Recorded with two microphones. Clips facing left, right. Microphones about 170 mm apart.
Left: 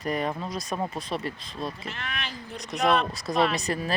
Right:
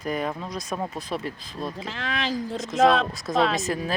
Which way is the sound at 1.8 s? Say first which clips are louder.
Right 6 dB; 90° right.